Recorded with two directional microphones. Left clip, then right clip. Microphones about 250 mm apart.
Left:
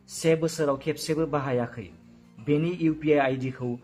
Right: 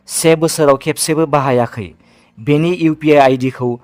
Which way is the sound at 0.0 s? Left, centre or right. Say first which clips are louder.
Right 12 dB; right.